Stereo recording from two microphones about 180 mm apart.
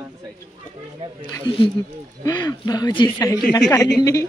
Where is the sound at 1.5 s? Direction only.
25° left (ahead or behind).